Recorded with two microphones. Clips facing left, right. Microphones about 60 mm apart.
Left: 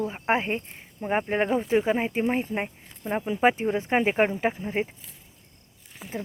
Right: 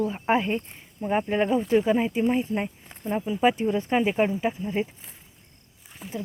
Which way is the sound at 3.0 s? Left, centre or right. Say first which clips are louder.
Even; left.